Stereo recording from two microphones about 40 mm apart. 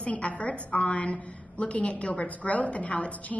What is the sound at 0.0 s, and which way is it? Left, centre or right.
A woman's voice, left.